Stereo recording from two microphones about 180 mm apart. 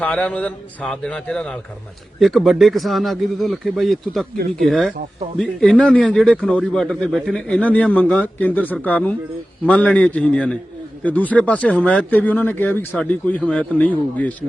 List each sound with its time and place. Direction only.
0.0 s speech: 5° left (ahead or behind)
4.4 s speech: 55° right (ahead or behind)
4.7 s speech: centre (ahead or behind)